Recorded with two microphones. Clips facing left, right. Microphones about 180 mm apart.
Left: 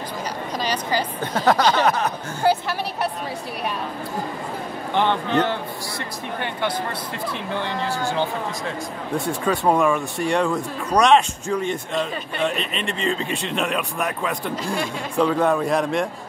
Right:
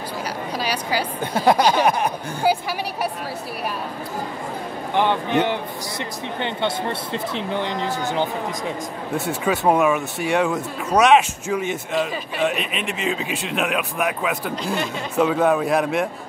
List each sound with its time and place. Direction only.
0.6 s a sound: 10° right (ahead or behind)
4.9 s speech: 15° right (ahead or behind)
9.1 s speech: 5° right (ahead or behind)